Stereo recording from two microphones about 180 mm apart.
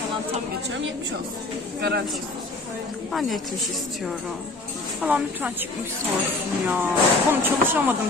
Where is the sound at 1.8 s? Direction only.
65° right (ahead or behind).